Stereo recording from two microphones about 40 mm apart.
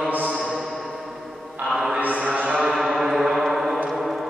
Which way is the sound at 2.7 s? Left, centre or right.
Centre.